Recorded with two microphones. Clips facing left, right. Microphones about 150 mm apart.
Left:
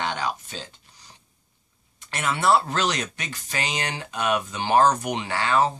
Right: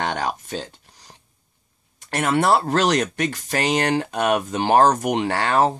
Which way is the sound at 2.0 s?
55° right (ahead or behind).